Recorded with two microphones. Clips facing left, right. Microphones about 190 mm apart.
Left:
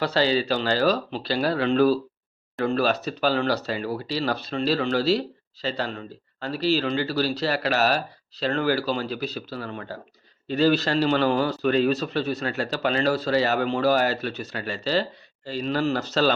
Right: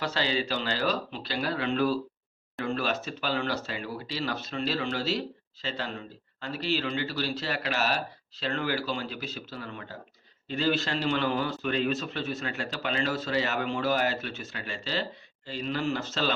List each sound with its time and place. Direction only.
0.0 s speech: 35° left (ahead or behind)